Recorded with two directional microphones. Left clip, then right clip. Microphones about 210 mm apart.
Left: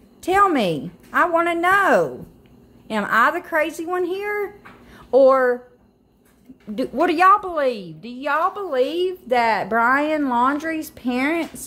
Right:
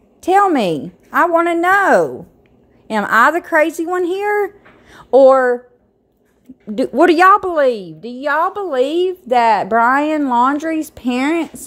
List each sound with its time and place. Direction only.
0.2 s a woman's voice: 25° right (ahead or behind)
6.7 s a woman's voice: 35° right (ahead or behind)